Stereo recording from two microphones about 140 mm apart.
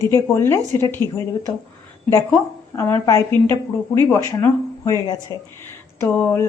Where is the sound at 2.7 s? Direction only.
20° left (ahead or behind).